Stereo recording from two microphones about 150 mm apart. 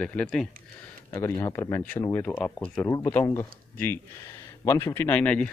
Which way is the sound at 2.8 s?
20° left (ahead or behind).